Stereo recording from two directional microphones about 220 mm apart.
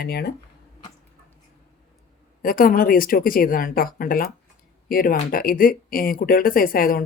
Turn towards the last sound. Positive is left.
turn(degrees=40)  # may be behind; listen again after turning